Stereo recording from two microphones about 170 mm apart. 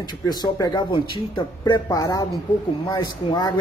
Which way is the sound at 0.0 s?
25° left (ahead or behind).